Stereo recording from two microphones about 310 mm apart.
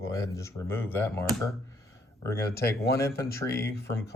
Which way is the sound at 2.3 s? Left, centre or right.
Left.